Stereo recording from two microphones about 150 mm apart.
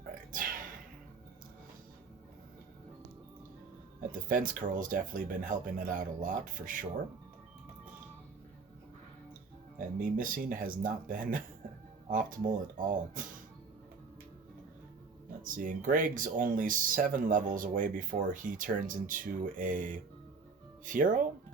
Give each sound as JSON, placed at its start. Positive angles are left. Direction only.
{"t": 0.1, "sound": "a sound", "side_deg": -65}
{"t": 4.3, "sound": "speech", "side_deg": -65}
{"t": 10.0, "sound": "speech", "side_deg": -65}
{"t": 15.4, "sound": "speech", "side_deg": -60}